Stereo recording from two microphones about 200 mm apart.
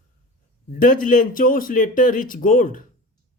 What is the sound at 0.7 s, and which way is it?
Speech, 45° left (ahead or behind).